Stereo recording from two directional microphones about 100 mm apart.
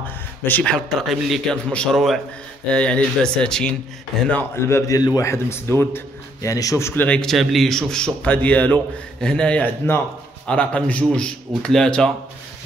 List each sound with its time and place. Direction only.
0.4 s a man's voice: 15° left (ahead or behind)
0.7 s a man's voice: 5° left (ahead or behind)
4.6 s a man's voice: 25° left (ahead or behind)
7.0 s a man's voice: 10° left (ahead or behind)